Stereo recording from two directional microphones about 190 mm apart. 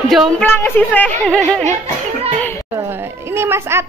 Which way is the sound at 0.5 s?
10° left (ahead or behind).